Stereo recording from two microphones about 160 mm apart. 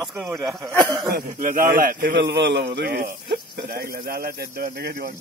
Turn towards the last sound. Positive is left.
turn(degrees=-75)  # may be behind; listen again after turning